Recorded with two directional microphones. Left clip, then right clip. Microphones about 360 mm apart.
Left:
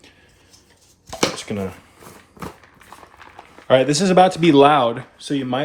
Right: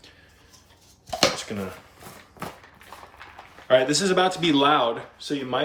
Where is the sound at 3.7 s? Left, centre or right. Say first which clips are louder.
Left 4 dB; centre.